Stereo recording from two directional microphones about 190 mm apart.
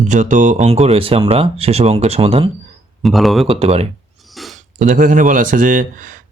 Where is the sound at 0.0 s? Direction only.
40° right (ahead or behind).